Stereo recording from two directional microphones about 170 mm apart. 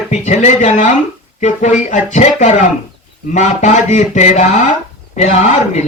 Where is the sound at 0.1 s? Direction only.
45° left (ahead or behind).